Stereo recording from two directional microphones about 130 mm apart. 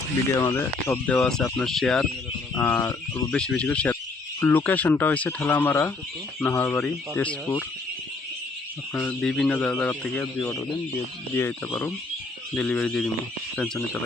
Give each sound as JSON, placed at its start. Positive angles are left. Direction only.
{"t": 0.3, "sound": "speech", "side_deg": 20}
{"t": 1.1, "sound": "speech", "side_deg": 5}
{"t": 2.6, "sound": "speech", "side_deg": 20}
{"t": 3.3, "sound": "speech", "side_deg": 10}
{"t": 8.9, "sound": "speech", "side_deg": 10}